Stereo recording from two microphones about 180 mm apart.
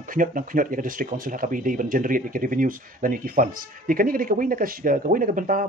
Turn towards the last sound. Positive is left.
turn(degrees=-50)  # may be behind; listen again after turning